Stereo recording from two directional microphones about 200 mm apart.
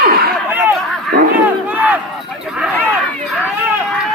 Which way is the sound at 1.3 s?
10° right (ahead or behind).